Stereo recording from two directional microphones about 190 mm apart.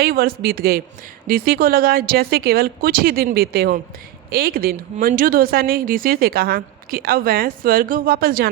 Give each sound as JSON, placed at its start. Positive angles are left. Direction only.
{"t": 0.0, "sound": "a woman's voice", "side_deg": -50}